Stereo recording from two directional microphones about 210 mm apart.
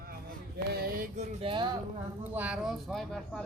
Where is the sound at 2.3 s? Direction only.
5° right (ahead or behind).